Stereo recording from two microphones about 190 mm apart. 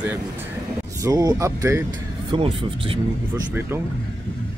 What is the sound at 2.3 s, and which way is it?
Speech, 25° right (ahead or behind).